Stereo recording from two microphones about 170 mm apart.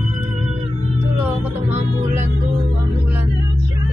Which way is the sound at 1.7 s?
40° right (ahead or behind).